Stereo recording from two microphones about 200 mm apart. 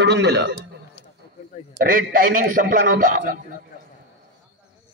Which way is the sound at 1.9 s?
45° right (ahead or behind).